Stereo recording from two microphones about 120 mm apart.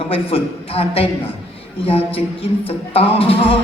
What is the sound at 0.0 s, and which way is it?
Music, 50° left (ahead or behind).